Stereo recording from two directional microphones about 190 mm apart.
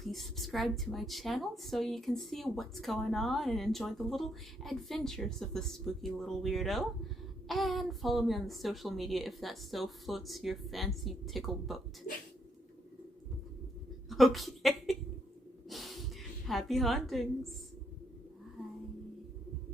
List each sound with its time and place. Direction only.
0.0 s a woman's voice: centre (ahead or behind)
12.1 s speech: 45° left (ahead or behind)
14.1 s a woman's voice: centre (ahead or behind)
15.7 s snort: centre (ahead or behind)
16.5 s a woman's voice: centre (ahead or behind)